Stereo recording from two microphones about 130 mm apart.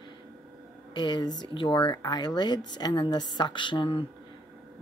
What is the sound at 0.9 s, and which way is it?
A woman's voice, 35° left (ahead or behind).